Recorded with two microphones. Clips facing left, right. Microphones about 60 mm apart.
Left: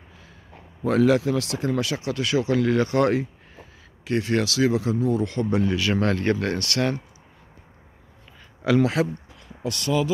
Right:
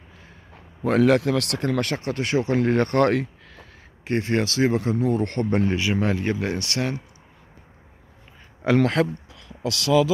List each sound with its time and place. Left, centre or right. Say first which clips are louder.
0.8 s speech: right 1 dB; right
4.0 s speech: even; right
5.8 s speech: left 1 dB; centre
8.7 s speech: right 1 dB; right
9.3 s a sound: right 2 dB; right